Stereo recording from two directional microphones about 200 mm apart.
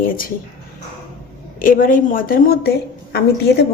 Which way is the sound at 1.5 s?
45° left (ahead or behind).